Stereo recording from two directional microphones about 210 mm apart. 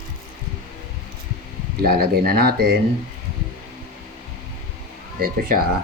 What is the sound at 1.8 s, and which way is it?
Speech, 45° right (ahead or behind).